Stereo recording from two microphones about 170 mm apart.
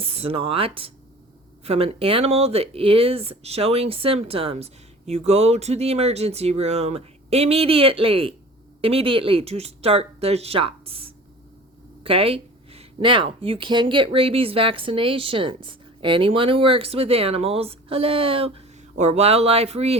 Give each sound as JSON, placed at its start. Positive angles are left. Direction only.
{"t": 0.0, "sound": "speech", "side_deg": -35}